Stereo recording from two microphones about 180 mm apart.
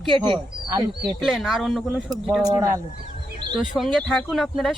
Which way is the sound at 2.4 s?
20° right (ahead or behind).